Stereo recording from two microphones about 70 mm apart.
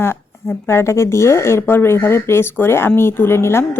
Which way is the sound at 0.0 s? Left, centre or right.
Left.